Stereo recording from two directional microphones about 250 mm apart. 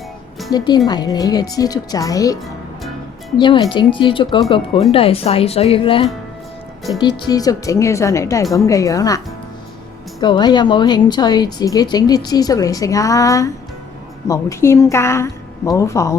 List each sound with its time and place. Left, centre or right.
0.5 s speech: centre
7.3 s speech: centre